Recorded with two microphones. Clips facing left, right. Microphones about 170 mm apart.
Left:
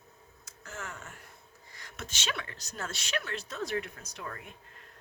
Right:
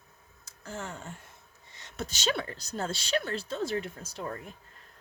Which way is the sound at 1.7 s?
25° right (ahead or behind).